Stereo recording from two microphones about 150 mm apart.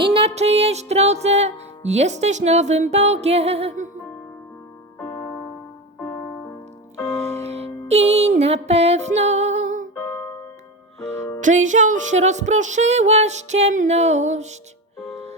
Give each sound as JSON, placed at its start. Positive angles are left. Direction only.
{"t": 0.0, "sound": "music", "side_deg": -35}
{"t": 6.9, "sound": "music", "side_deg": 15}
{"t": 7.4, "sound": "music", "side_deg": -45}
{"t": 11.4, "sound": "music", "side_deg": -55}